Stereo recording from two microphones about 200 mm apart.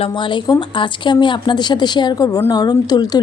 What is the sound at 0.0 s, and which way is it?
Speech, 25° left (ahead or behind).